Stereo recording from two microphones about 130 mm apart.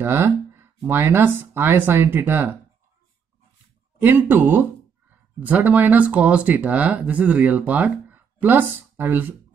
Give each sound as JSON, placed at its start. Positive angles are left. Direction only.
{"t": 0.0, "sound": "speech", "side_deg": -15}
{"t": 4.0, "sound": "speech", "side_deg": -15}